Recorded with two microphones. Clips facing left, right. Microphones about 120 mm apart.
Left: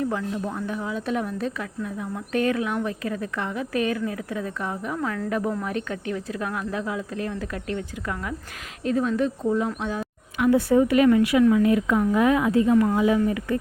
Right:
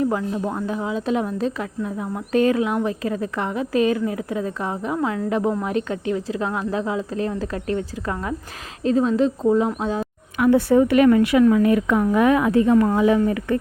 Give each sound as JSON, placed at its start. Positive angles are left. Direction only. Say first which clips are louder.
{"t": 0.0, "sound": "a woman's voice", "louder": "right 4 dB", "side_deg": -30}
{"t": 10.3, "sound": "a woman's voice", "louder": "right 3 dB", "side_deg": -60}